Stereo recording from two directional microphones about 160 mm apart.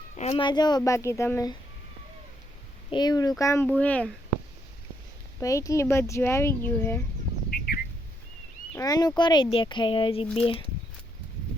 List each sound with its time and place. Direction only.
0.2 s speech: 45° left (ahead or behind)
0.4 s speech: 25° left (ahead or behind)
2.9 s speech: 25° left (ahead or behind); by 4.1 s 10° left (ahead or behind)
5.4 s speech: 20° left (ahead or behind)
7.5 s bird: 70° left (ahead or behind)
8.7 s speech: 20° left (ahead or behind)